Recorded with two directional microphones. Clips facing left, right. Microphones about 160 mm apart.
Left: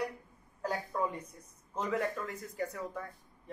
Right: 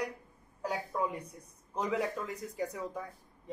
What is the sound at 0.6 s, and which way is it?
Speech, 10° right (ahead or behind).